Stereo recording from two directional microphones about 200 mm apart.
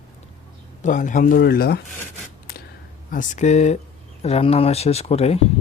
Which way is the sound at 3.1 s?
40° left (ahead or behind).